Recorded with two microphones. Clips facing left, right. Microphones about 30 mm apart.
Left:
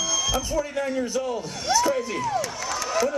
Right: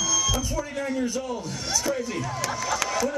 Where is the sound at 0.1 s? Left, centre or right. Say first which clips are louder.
Left 1 dB; centre.